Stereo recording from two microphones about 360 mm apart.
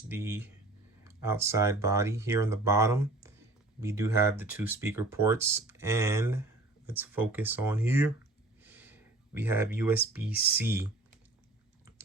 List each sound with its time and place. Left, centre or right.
0.1 s speech: centre
8.6 s a sound: centre
10.3 s speech: left
10.6 s speech: centre